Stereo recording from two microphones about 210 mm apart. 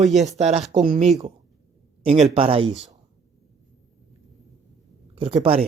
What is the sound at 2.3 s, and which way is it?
Speech, 25° right (ahead or behind).